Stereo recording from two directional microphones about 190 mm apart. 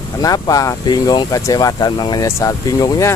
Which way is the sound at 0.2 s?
20° left (ahead or behind).